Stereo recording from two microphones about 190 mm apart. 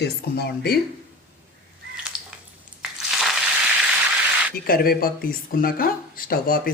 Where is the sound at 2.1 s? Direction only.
5° right (ahead or behind).